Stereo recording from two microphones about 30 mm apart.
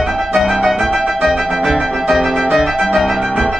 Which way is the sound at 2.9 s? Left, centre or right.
Centre.